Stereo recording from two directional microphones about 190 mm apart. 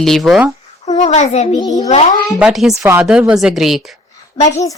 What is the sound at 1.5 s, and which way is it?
Speech, 20° left (ahead or behind).